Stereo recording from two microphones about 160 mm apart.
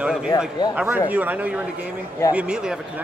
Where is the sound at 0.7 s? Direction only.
10° right (ahead or behind).